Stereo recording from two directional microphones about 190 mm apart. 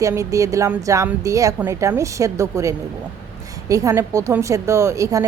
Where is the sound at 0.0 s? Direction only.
15° right (ahead or behind).